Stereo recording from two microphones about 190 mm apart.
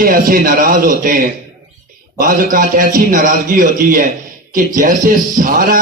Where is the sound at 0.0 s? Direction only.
50° right (ahead or behind).